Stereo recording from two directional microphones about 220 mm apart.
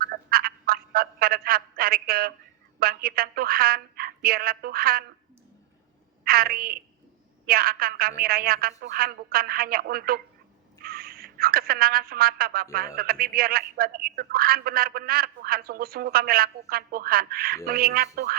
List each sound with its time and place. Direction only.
0.0 s telephone: 40° right (ahead or behind)
2.7 s a man's voice: 45° right (ahead or behind)
6.2 s a woman's voice: 40° right (ahead or behind)